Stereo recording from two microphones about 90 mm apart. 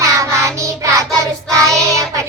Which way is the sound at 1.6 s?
35° right (ahead or behind).